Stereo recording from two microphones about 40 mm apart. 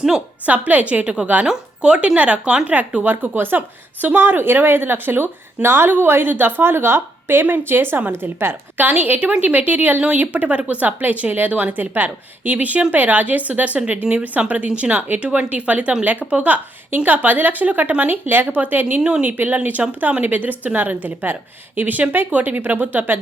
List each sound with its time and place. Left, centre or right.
0.4 s speech: right
1.5 s a woman's voice: right
5.6 s a woman's voice: right
5.9 s a woman's voice: right
6.6 s speech: right
7.4 s a woman's voice: right
8.2 s a woman's voice: right
8.8 s a woman's voice: right
12.5 s a woman's voice: right
16.9 s a woman's voice: right